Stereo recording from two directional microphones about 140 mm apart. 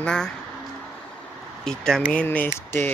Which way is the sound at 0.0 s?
5° left (ahead or behind).